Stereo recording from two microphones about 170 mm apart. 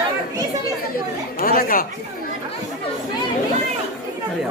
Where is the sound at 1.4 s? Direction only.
60° left (ahead or behind).